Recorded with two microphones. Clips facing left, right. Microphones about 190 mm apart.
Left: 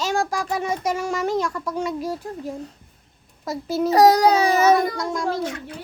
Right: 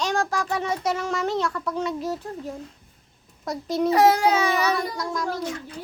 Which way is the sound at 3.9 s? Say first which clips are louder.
Left 4 dB; 40° left (ahead or behind).